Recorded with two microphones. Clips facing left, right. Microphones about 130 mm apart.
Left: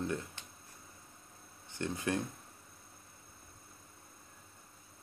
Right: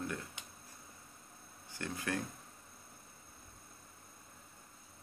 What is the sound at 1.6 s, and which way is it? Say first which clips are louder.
Speech: left 4 dB; 20° left (ahead or behind).